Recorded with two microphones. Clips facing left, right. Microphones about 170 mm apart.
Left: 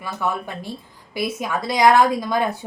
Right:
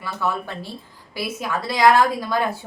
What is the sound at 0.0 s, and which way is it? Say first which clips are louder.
A woman's voice: even; 15° left (ahead or behind).